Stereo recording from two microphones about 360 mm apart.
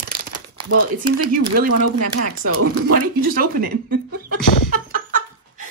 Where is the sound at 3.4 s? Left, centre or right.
Right.